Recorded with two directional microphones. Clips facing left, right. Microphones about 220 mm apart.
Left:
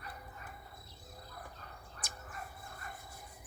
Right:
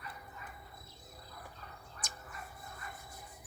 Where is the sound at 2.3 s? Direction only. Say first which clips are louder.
Left 1 dB; 40° left (ahead or behind).